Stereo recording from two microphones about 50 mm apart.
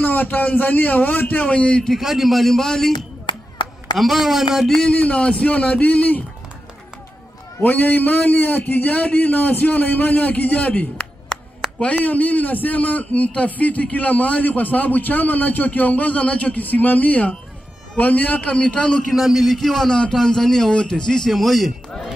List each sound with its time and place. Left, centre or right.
0.0 s a man's voice: left
1.4 s a man's voice: left
2.0 s a man's voice: centre
4.0 s a man's voice: centre
4.9 s a man's voice: left
7.6 s a man's voice: left
12.0 s a man's voice: left
18.4 s a man's voice: left
19.1 s a man's voice: centre